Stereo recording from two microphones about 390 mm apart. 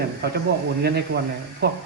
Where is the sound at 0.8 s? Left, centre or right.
Right.